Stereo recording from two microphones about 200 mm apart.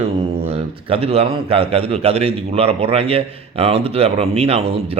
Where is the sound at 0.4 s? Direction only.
30° right (ahead or behind).